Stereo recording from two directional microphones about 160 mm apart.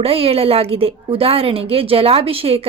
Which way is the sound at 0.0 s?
35° right (ahead or behind).